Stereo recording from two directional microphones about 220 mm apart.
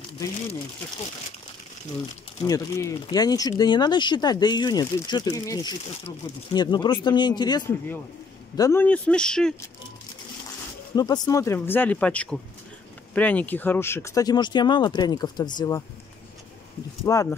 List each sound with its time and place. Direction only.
2.4 s speech: 15° left (ahead or behind)
11.0 s speech: 20° left (ahead or behind)
17.0 s speech: 15° left (ahead or behind)